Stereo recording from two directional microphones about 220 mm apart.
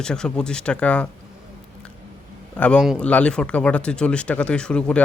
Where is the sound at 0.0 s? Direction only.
5° left (ahead or behind).